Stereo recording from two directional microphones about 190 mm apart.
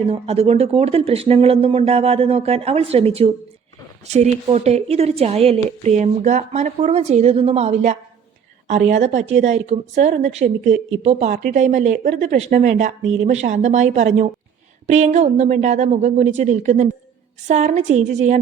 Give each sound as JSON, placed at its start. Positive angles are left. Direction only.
{"t": 0.0, "sound": "a woman's voice", "side_deg": -30}